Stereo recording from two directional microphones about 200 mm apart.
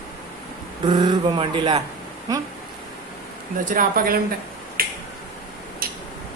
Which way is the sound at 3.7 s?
45° right (ahead or behind).